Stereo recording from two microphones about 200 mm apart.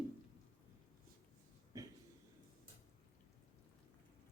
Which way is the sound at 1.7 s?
15° right (ahead or behind).